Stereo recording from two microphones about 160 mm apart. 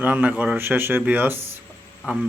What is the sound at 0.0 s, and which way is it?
Speech, 10° right (ahead or behind).